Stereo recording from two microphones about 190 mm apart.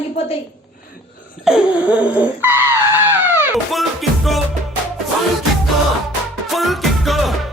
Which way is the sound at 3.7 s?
Centre (ahead or behind).